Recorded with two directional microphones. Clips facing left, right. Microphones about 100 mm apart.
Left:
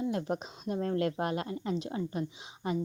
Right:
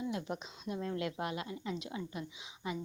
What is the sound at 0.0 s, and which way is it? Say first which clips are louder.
A woman's voice: left 6 dB; 45° left (ahead or behind).